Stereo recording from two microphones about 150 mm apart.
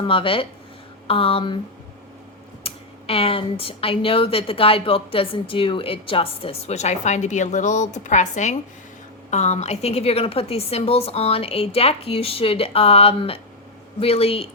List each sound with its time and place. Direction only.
0.0 s speech: 35° left (ahead or behind)
2.6 s a woman's voice: 40° left (ahead or behind)